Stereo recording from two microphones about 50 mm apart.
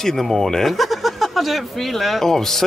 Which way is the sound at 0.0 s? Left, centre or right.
Centre.